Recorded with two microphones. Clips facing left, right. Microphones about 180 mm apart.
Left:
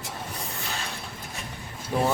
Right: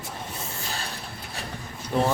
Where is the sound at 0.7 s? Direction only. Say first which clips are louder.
Even; 35° right (ahead or behind).